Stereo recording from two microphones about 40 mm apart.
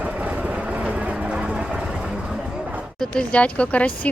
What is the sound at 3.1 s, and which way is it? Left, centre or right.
Speech, left.